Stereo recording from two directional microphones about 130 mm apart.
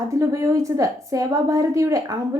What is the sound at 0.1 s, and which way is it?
A woman's voice, 25° right (ahead or behind).